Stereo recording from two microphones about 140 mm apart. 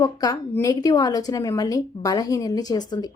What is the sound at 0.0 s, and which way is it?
A woman's voice, 30° left (ahead or behind).